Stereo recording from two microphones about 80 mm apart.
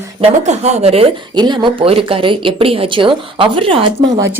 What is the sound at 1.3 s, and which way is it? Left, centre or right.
Speech, right.